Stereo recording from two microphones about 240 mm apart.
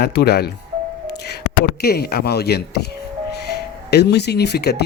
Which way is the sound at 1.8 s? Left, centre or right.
Left.